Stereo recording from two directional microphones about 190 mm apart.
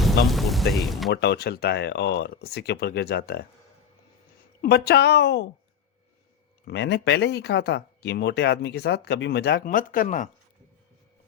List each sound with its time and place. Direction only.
0.0 s speech: centre (ahead or behind)
1.1 s speech: 60° left (ahead or behind)
4.6 s speech: 60° left (ahead or behind)
6.7 s speech: 65° left (ahead or behind); by 10.2 s 45° left (ahead or behind)